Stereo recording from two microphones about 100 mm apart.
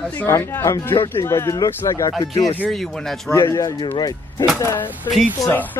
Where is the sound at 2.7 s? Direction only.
5° left (ahead or behind).